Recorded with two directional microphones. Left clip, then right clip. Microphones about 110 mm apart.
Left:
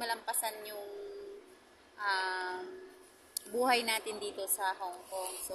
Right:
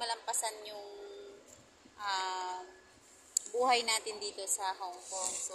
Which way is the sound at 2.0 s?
30° left (ahead or behind).